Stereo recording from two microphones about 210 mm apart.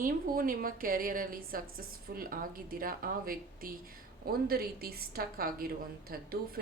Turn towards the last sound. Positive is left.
turn(degrees=-45)  # may be behind; listen again after turning